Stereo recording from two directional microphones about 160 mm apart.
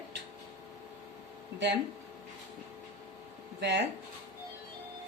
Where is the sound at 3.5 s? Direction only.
90° right.